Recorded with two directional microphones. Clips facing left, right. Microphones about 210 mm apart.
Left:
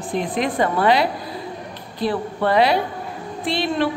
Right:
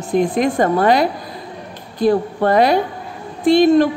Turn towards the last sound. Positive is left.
turn(degrees=-45)  # may be behind; listen again after turning